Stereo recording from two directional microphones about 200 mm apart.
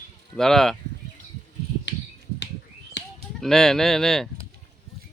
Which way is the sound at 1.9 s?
65° left (ahead or behind).